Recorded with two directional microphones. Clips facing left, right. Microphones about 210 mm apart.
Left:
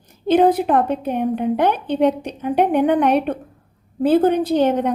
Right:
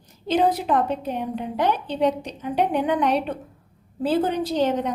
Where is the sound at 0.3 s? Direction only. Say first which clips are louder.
Left 6 dB; 55° left (ahead or behind).